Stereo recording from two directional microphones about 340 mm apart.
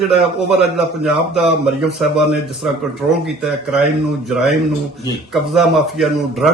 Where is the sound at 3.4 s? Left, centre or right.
Centre.